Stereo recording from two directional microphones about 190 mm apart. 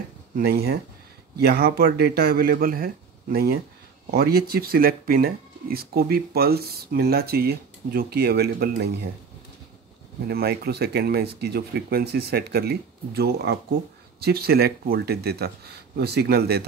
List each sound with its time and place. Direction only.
0.4 s speech: 55° right (ahead or behind)
10.2 s speech: 55° right (ahead or behind)